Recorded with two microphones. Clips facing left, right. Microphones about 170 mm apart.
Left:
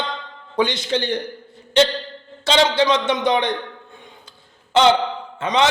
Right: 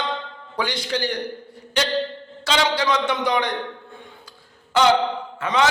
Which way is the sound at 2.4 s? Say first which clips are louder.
Left 4 dB; 25° left (ahead or behind).